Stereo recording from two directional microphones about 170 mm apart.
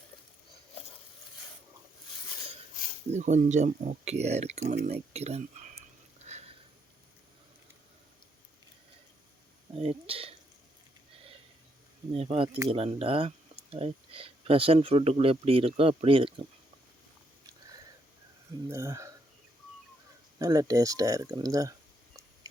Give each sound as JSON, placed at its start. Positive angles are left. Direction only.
{"t": 3.1, "sound": "speech", "side_deg": -45}
{"t": 9.7, "sound": "speech", "side_deg": -35}
{"t": 12.1, "sound": "speech", "side_deg": -35}
{"t": 18.7, "sound": "speech", "side_deg": -15}
{"t": 20.4, "sound": "speech", "side_deg": -20}